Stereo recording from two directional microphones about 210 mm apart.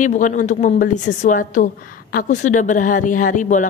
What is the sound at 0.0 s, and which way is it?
A woman's voice, 35° left (ahead or behind).